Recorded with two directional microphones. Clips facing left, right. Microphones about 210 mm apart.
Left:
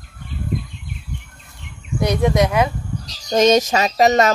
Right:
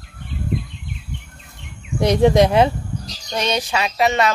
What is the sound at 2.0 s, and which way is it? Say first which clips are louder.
Speech: right 3 dB; 30° right (ahead or behind).